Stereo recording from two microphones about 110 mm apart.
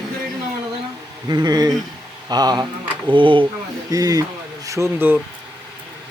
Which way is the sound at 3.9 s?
35° right (ahead or behind).